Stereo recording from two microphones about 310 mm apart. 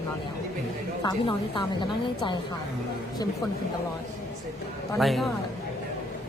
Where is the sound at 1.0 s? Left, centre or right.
Centre.